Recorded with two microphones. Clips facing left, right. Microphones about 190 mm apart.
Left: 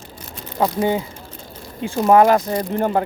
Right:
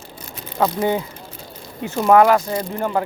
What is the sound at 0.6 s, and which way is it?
Speech, 25° left (ahead or behind).